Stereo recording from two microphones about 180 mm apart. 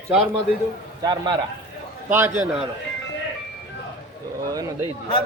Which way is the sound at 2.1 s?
10° right (ahead or behind).